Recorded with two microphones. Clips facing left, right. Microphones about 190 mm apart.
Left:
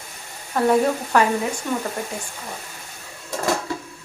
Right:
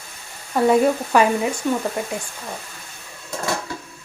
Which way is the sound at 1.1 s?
15° right (ahead or behind).